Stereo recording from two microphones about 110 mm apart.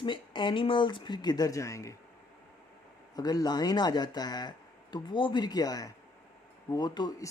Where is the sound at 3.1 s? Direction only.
35° left (ahead or behind).